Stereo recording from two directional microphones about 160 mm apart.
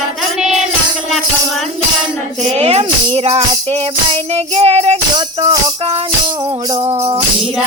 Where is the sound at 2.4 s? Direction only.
40° right (ahead or behind).